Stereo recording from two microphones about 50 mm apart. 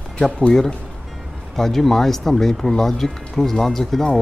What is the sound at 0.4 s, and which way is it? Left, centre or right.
Speech, centre.